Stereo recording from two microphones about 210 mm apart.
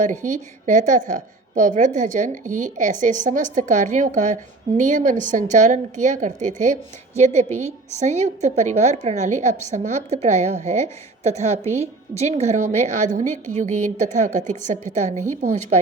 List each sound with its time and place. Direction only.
0.0 s a woman's voice: 35° right (ahead or behind)